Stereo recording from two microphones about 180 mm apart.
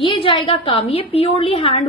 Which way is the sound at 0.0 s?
30° left (ahead or behind).